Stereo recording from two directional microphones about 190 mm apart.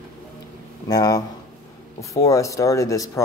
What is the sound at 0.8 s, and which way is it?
Speech, 20° left (ahead or behind).